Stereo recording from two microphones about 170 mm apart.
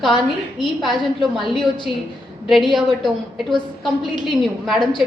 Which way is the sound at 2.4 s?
Centre (ahead or behind).